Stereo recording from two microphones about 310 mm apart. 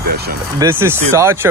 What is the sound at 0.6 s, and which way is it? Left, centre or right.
Speech, centre.